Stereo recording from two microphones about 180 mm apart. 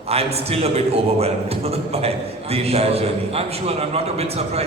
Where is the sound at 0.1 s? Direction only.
35° right (ahead or behind).